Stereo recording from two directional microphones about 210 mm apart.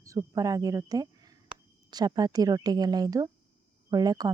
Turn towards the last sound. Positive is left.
turn(degrees=-20)  # may be behind; listen again after turning